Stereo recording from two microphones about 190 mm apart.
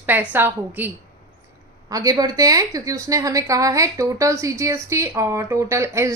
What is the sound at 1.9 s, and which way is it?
A woman's voice, 20° right (ahead or behind).